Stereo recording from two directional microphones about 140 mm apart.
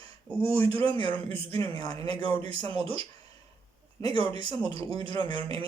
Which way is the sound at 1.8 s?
30° left (ahead or behind).